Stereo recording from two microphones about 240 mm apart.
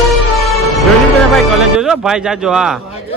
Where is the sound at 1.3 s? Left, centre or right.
Centre.